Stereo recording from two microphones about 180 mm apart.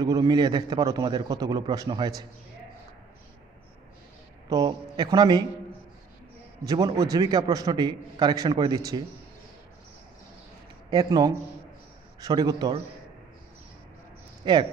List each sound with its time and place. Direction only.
0.0 s a man's voice: 20° right (ahead or behind)
4.5 s a man's voice: 20° right (ahead or behind)
6.6 s a man's voice: 20° right (ahead or behind)
10.9 s a man's voice: 20° right (ahead or behind)
14.4 s speech: 25° right (ahead or behind)